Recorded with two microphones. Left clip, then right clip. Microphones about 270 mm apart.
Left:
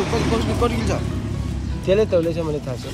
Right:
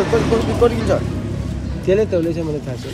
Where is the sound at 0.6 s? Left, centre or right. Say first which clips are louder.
Right 6 dB; left.